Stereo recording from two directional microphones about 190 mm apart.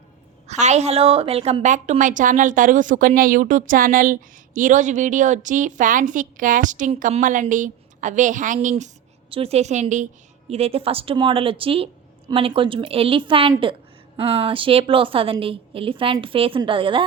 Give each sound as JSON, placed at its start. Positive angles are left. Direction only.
{"t": 0.4, "sound": "a woman's voice", "side_deg": -35}